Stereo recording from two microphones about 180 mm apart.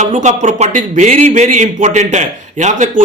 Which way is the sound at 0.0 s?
40° right (ahead or behind).